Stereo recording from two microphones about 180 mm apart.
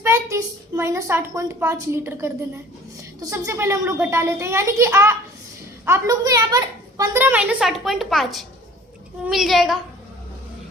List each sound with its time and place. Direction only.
0.0 s a child's voice: 15° right (ahead or behind)
7.6 s a woman's voice: centre (ahead or behind)